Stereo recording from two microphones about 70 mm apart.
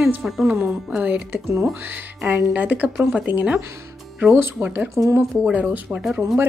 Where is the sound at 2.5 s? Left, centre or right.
Right.